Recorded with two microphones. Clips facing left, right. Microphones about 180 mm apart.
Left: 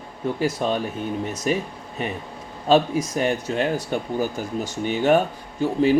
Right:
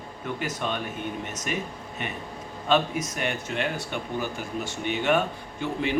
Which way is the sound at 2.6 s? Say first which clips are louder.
Left 6 dB; 35° left (ahead or behind).